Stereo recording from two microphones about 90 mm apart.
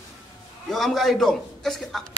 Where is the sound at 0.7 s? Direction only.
Centre (ahead or behind).